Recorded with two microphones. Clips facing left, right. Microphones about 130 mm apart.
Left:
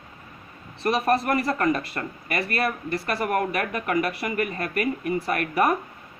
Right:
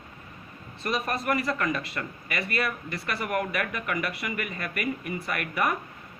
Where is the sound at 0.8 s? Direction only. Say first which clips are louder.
Left 7 dB; 35° left (ahead or behind).